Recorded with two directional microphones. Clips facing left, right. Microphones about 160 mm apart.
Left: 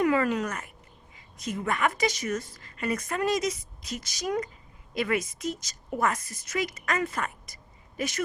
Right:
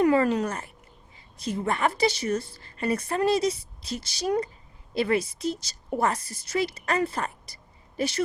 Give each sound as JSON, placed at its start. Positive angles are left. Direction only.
{"t": 0.0, "sound": "a woman's voice", "side_deg": -30}